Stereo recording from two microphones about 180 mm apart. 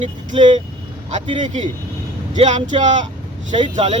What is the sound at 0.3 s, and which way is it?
Speech, 30° right (ahead or behind).